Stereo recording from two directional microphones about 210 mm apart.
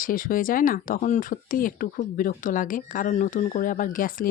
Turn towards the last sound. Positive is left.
turn(degrees=40)  # may be behind; listen again after turning